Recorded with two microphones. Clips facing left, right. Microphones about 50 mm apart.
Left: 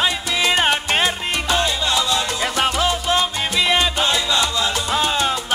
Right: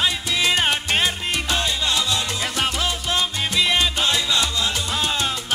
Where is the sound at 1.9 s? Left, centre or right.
Left.